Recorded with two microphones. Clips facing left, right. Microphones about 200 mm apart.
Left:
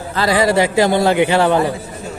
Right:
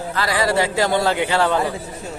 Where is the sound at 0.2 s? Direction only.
25° left (ahead or behind).